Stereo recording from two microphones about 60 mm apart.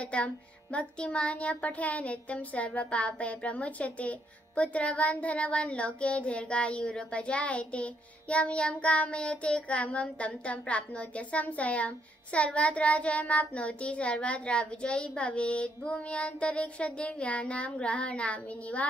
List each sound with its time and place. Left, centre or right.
0.0 s a child's voice: centre